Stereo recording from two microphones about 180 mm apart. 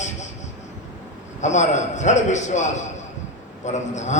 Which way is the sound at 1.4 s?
40° left (ahead or behind).